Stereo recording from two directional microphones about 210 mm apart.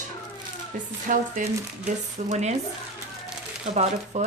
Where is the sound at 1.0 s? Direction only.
40° right (ahead or behind).